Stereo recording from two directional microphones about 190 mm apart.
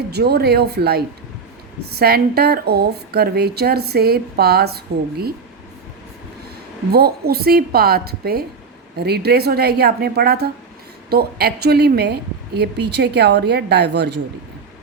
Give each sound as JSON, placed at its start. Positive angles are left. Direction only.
{"t": 0.1, "sound": "a woman's voice", "side_deg": -60}
{"t": 6.9, "sound": "a woman's voice", "side_deg": -55}